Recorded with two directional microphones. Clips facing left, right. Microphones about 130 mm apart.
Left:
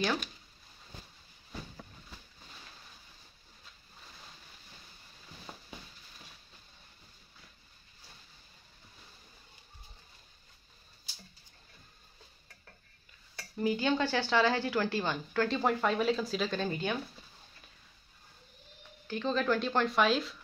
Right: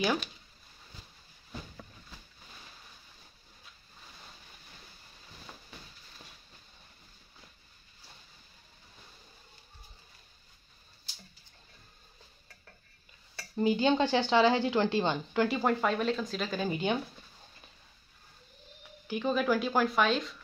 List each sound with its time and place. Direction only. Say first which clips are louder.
5.5 s a sound: left 3 dB; 20° left (ahead or behind)
13.6 s a woman's voice: right 4 dB; 25° right (ahead or behind)
15.6 s speech: even; centre (ahead or behind)
16.6 s a woman's voice: right 3 dB; 20° right (ahead or behind)
19.0 s speech: right 2 dB; 15° right (ahead or behind)